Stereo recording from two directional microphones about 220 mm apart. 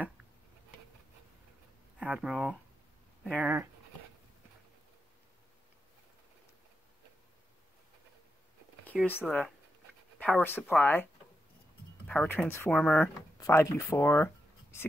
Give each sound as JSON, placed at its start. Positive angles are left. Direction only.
{"t": 2.0, "sound": "speech", "side_deg": -5}
{"t": 9.2, "sound": "speech", "side_deg": 5}
{"t": 12.1, "sound": "speech", "side_deg": 5}